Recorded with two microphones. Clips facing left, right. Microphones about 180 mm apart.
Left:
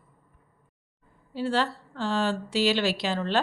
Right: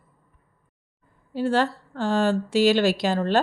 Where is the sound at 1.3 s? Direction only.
50° right (ahead or behind).